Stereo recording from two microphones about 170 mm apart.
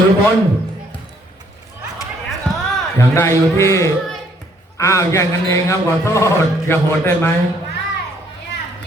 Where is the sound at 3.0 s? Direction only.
15° left (ahead or behind).